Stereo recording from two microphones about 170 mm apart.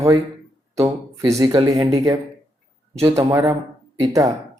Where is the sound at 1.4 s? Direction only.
25° right (ahead or behind).